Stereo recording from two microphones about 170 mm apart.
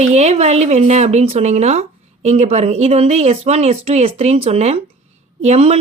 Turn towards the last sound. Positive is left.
turn(degrees=-40)  # may be behind; listen again after turning